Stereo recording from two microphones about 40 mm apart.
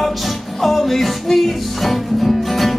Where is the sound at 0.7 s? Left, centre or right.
Centre.